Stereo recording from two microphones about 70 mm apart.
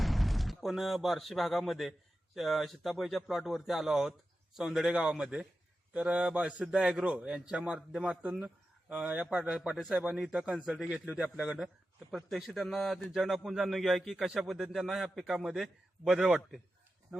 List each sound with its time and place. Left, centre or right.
0.0 s a man's voice: centre
17.1 s speech: centre